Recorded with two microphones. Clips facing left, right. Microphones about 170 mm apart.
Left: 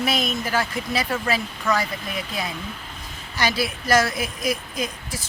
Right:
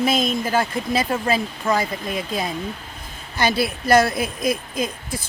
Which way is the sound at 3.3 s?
55° right (ahead or behind).